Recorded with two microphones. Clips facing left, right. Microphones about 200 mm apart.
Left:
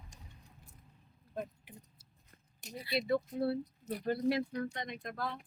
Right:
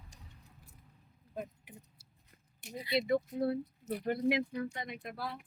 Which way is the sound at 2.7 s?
20° right (ahead or behind).